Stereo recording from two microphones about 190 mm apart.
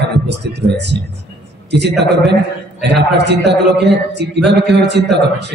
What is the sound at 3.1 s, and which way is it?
A man's voice, 65° right (ahead or behind).